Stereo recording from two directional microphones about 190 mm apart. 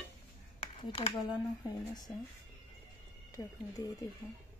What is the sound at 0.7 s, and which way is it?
Speech, 25° left (ahead or behind).